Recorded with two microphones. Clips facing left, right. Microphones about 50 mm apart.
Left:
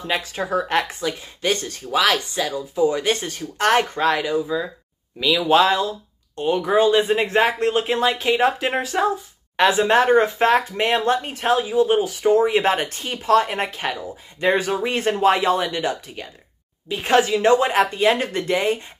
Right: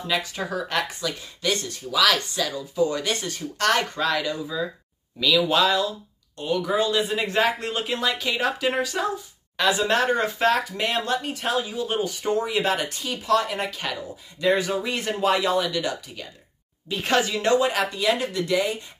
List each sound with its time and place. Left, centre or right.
0.3 s speech: left
2.0 s speech: left
3.1 s speech: left
12.0 s speech: centre
12.4 s speech: left